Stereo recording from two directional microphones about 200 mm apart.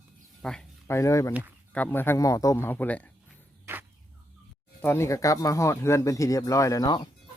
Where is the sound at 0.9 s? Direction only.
15° left (ahead or behind).